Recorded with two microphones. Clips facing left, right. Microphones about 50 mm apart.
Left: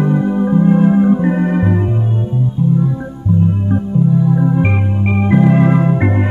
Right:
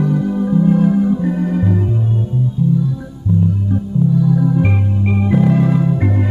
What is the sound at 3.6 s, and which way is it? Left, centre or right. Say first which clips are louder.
Music: left 2 dB; left.